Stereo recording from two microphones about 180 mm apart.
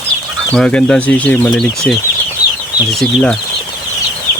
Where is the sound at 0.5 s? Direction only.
5° left (ahead or behind).